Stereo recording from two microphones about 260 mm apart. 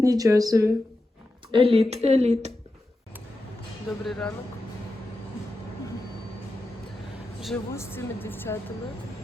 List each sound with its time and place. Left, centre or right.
0.0 s speech: centre
4.0 s speech: centre
7.4 s a woman's voice: centre